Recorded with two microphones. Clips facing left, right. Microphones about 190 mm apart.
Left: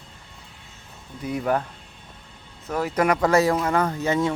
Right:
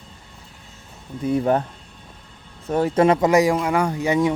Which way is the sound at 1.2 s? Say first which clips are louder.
Right 5 dB; 30° right (ahead or behind).